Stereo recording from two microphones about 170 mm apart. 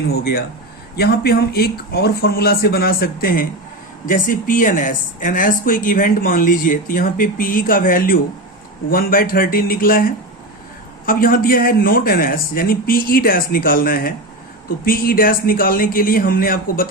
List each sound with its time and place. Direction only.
0.1 s a man's voice: 65° left (ahead or behind)